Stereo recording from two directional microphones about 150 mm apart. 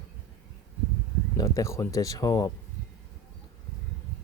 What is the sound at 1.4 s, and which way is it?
Speech, 20° left (ahead or behind).